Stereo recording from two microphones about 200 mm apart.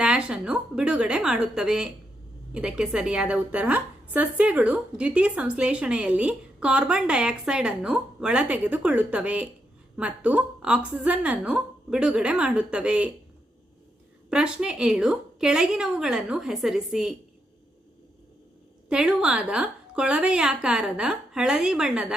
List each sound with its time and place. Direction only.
0.0 s a woman's voice: 5° right (ahead or behind)
14.3 s a woman's voice: 5° right (ahead or behind)
18.9 s a woman's voice: 5° right (ahead or behind)